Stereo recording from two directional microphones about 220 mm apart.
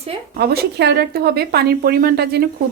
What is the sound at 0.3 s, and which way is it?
A woman's voice, 45° right (ahead or behind).